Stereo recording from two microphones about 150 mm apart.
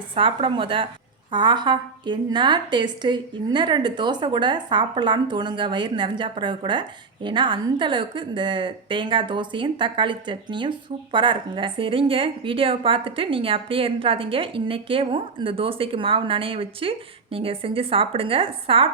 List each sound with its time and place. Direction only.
0.1 s a woman's voice: 35° right (ahead or behind)